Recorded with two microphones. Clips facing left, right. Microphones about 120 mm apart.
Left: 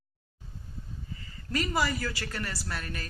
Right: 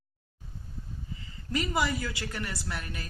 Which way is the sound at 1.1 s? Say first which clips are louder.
Even; 20° right (ahead or behind).